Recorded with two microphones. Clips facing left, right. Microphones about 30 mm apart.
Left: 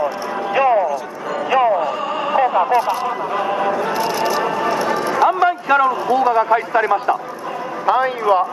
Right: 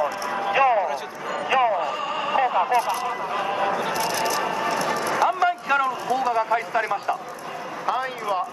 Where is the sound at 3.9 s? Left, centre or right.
Centre.